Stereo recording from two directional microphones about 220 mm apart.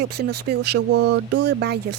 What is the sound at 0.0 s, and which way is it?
A woman's voice, 50° right (ahead or behind).